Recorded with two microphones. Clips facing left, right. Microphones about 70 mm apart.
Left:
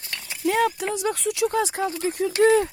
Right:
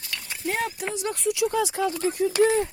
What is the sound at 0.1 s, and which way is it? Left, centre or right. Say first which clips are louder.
Horse: even; left.